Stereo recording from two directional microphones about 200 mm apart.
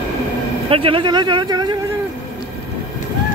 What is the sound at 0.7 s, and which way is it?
Speech, 25° right (ahead or behind).